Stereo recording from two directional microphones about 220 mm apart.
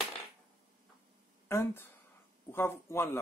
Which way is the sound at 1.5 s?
10° left (ahead or behind).